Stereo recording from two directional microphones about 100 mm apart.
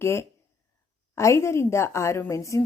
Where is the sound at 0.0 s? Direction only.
25° left (ahead or behind).